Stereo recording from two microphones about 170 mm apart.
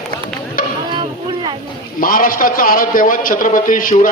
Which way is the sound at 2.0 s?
55° left (ahead or behind).